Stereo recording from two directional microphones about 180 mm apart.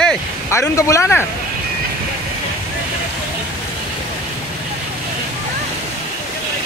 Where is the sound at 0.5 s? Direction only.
15° left (ahead or behind).